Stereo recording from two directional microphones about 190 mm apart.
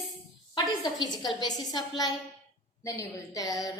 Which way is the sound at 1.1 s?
20° left (ahead or behind).